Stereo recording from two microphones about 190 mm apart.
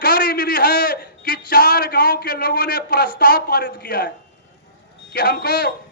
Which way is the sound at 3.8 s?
55° left (ahead or behind).